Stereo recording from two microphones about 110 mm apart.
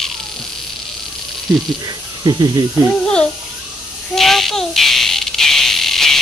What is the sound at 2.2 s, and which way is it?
Speech, 40° right (ahead or behind).